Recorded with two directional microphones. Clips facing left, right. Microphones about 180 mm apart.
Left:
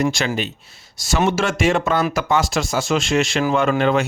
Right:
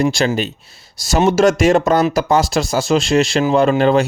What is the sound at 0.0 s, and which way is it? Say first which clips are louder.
Speech: right 4 dB; 35° right (ahead or behind).